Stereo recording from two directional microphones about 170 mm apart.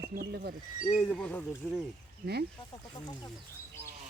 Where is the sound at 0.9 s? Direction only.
5° left (ahead or behind).